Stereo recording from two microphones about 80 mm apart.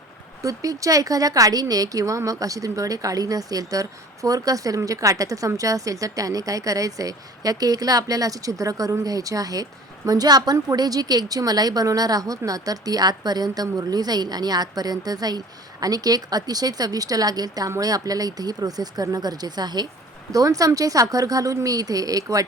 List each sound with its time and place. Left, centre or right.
0.4 s a woman's voice: right
20.3 s speech: right